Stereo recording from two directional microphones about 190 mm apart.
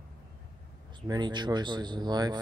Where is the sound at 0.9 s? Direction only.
25° right (ahead or behind).